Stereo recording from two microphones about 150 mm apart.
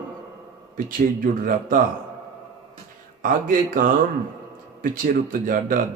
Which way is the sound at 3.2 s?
65° right (ahead or behind).